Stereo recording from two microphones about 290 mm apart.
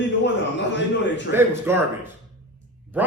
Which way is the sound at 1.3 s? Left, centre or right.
Centre.